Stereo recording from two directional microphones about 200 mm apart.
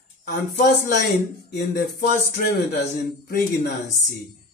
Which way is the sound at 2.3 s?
50° left (ahead or behind).